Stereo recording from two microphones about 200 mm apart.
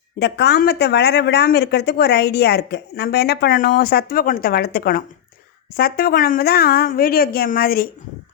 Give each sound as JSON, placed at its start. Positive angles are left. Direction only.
{"t": 0.2, "sound": "a woman's voice", "side_deg": 55}